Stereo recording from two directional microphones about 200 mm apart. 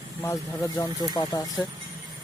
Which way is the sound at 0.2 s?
15° left (ahead or behind).